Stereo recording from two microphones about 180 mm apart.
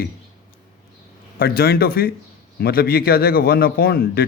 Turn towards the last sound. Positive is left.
turn(degrees=60)  # may be behind; listen again after turning